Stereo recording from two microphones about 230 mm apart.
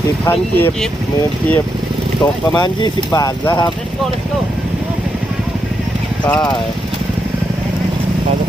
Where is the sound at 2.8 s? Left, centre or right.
Centre.